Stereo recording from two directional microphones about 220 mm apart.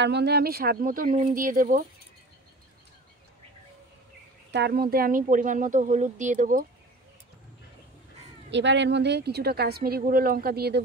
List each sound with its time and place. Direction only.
0.0 s speech: 50° right (ahead or behind)
4.5 s speech: 50° right (ahead or behind)
8.5 s speech: 55° right (ahead or behind)